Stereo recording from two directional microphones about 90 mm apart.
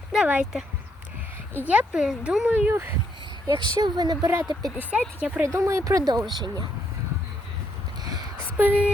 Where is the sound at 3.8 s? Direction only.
50° right (ahead or behind).